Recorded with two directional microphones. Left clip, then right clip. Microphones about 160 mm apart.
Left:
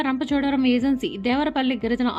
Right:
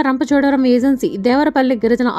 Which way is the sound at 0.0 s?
40° right (ahead or behind).